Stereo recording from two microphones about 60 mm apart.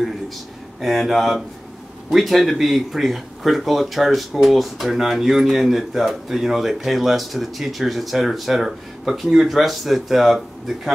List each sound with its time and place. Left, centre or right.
0.7 s speech: centre